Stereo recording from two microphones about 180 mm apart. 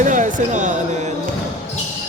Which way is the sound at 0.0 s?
45° right (ahead or behind).